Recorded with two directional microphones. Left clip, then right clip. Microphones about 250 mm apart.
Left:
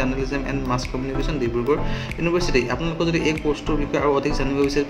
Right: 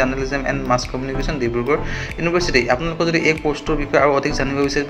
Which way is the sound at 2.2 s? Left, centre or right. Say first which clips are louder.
Right 4 dB; centre.